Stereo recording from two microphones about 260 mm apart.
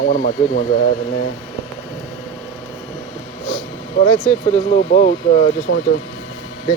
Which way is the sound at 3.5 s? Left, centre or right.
Left.